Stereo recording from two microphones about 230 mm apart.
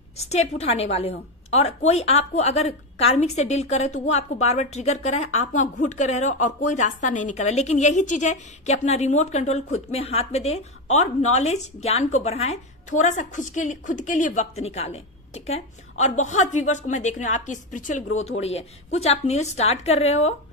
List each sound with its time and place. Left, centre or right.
0.3 s a woman's voice: left